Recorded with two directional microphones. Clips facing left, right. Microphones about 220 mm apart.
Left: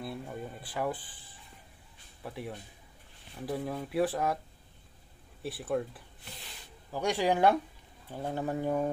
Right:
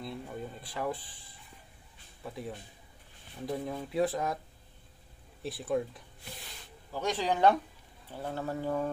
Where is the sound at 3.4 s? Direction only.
5° left (ahead or behind).